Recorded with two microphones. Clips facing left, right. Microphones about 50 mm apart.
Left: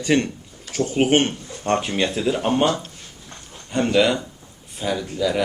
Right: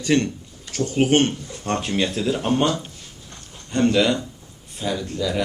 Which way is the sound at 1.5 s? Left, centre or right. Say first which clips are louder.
Left 7 dB; left.